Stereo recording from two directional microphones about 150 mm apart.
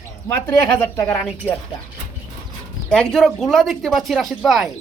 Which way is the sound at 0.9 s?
15° left (ahead or behind).